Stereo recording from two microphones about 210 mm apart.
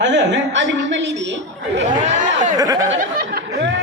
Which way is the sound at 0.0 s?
60° right (ahead or behind).